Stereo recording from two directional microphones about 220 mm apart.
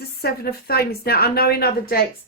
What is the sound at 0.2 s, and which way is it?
Speech, 45° left (ahead or behind).